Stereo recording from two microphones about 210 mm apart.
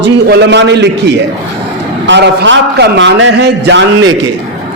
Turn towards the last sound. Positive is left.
turn(degrees=-60)  # may be behind; listen again after turning